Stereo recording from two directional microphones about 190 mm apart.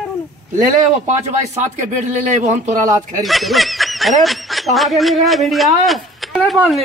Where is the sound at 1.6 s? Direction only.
40° right (ahead or behind).